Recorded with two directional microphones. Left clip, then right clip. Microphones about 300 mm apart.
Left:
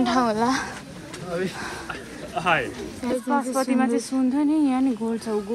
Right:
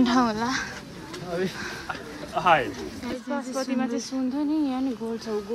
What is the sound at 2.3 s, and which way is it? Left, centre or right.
Speech, right.